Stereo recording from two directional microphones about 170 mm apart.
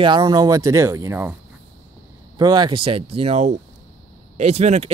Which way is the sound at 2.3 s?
25° right (ahead or behind).